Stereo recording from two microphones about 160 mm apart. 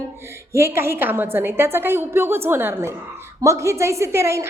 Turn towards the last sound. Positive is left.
turn(degrees=-15)  # may be behind; listen again after turning